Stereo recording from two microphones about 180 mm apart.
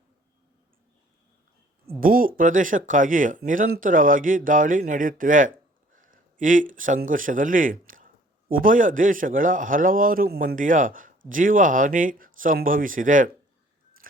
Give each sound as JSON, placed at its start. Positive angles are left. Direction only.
{"t": 2.0, "sound": "speech", "side_deg": -50}
{"t": 14.0, "sound": "chewing", "side_deg": -50}